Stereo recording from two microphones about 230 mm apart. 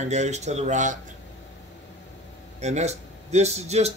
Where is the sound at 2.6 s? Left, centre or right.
Right.